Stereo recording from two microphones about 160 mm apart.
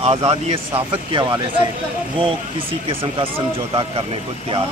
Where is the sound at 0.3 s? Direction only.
35° right (ahead or behind).